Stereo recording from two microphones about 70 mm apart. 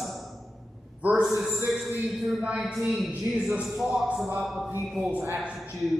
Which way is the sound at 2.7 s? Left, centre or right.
Centre.